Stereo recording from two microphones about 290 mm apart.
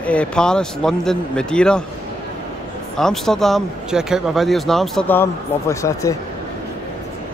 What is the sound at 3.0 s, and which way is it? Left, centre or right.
Speech, centre.